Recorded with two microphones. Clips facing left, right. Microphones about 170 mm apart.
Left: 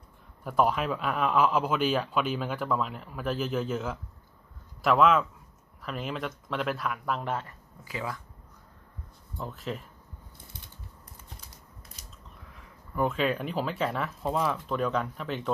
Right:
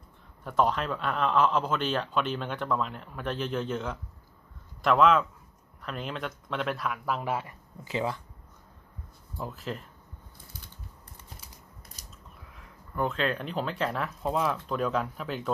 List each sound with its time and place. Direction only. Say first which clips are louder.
0.4 s a man's voice: left 1 dB; 5° left (ahead or behind); by 7.5 s 10° right (ahead or behind)
7.9 s speech: right 5 dB; 25° right (ahead or behind)
9.4 s a man's voice: even; centre (ahead or behind)
12.5 s a man's voice: left 2 dB; 5° left (ahead or behind)